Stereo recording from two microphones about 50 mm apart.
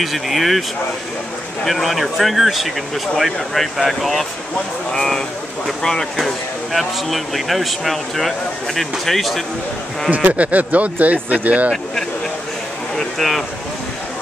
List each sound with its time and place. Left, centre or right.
0.0 s speech: centre
10.1 s speech: right
12.9 s a sound: centre